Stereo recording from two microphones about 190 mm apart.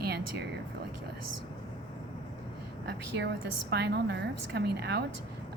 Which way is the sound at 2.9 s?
65° right (ahead or behind).